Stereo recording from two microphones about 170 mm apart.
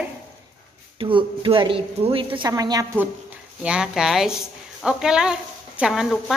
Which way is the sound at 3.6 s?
5° right (ahead or behind).